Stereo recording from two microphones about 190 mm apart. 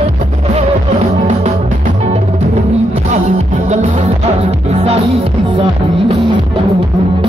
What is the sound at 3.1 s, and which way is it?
Music, 40° right (ahead or behind).